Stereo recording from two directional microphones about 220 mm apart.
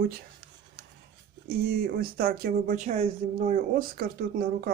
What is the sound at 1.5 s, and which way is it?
Speech, 45° right (ahead or behind).